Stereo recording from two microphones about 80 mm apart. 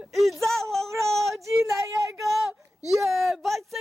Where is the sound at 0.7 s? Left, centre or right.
Centre.